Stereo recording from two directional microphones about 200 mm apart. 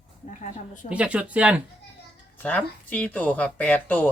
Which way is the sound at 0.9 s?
5° right (ahead or behind).